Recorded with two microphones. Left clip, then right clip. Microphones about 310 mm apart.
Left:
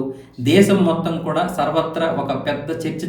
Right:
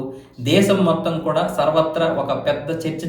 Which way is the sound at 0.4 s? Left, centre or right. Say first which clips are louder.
Left 1 dB; centre.